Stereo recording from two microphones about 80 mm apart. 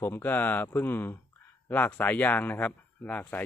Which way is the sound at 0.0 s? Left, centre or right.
Left.